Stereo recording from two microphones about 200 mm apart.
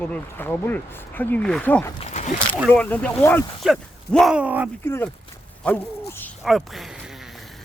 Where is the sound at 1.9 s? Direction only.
35° left (ahead or behind).